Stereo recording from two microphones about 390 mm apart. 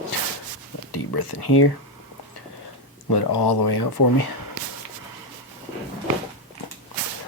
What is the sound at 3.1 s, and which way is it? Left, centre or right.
Speech, left.